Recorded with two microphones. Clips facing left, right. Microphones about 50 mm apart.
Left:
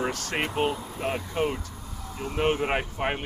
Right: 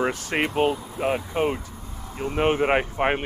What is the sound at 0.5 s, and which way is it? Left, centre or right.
Speech, centre.